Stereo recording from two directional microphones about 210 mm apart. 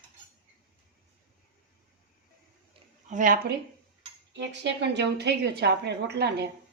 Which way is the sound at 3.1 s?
40° right (ahead or behind).